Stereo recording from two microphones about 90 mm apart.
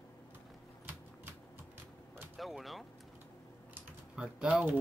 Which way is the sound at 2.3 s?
Centre (ahead or behind).